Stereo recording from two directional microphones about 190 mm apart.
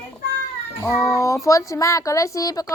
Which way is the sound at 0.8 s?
15° left (ahead or behind).